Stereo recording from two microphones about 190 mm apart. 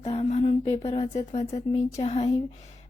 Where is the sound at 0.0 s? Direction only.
35° left (ahead or behind).